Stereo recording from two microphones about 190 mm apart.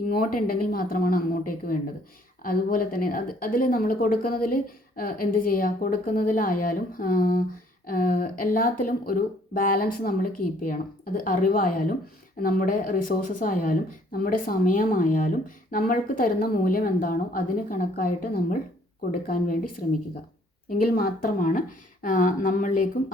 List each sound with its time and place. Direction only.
0.1 s speech: 50° left (ahead or behind)
20.7 s speech: 50° left (ahead or behind)